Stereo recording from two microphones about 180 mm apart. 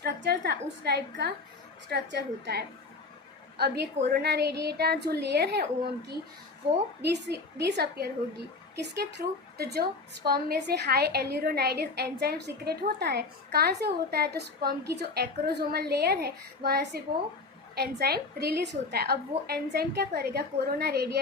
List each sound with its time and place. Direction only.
0.0 s a woman's voice: 65° right (ahead or behind)
7.0 s a woman's voice: 70° right (ahead or behind)